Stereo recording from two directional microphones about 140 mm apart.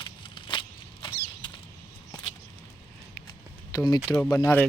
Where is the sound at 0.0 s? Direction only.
35° left (ahead or behind).